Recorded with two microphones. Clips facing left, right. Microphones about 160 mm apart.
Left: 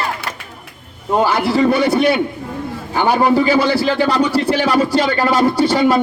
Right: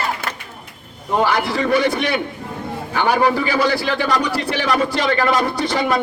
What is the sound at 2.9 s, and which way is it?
A man's voice, 30° left (ahead or behind).